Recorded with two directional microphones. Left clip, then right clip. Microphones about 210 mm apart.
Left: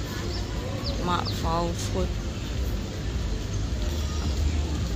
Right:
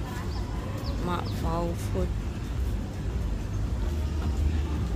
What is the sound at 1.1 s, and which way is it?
Speech, 5° right (ahead or behind).